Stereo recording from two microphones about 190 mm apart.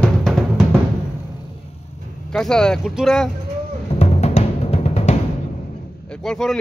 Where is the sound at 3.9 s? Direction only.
35° left (ahead or behind).